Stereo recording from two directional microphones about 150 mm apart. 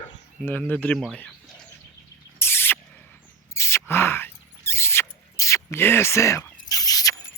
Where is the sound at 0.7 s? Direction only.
10° left (ahead or behind).